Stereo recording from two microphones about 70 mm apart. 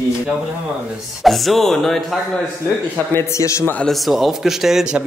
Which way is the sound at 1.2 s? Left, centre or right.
Centre.